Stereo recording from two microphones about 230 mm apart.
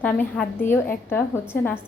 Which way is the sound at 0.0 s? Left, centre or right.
Centre.